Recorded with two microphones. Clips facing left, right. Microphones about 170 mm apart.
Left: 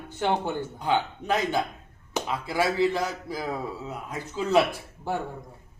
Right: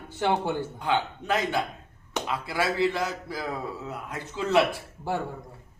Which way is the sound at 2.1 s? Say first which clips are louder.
Left 2 dB; 15° left (ahead or behind).